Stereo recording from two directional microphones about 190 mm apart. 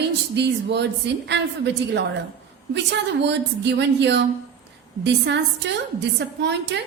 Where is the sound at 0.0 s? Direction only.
65° right (ahead or behind).